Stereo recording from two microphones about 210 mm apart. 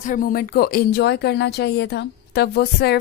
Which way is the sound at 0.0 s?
40° left (ahead or behind).